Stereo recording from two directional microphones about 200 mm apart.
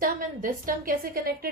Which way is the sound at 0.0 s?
45° right (ahead or behind).